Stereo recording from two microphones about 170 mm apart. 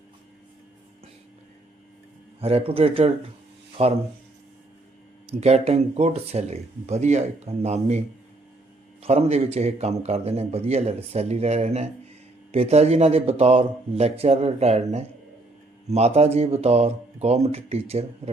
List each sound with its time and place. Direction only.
2.4 s a man's voice: 35° right (ahead or behind)
5.4 s a man's voice: 40° right (ahead or behind)
9.0 s a man's voice: 40° right (ahead or behind)